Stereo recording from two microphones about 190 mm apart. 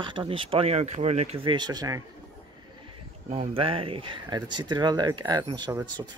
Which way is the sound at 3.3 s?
30° right (ahead or behind).